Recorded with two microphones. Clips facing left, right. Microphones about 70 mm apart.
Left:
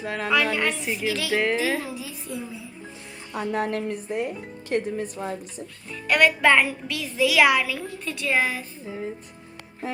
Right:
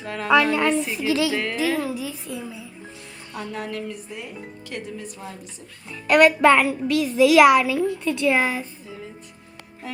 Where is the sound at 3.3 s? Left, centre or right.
Left.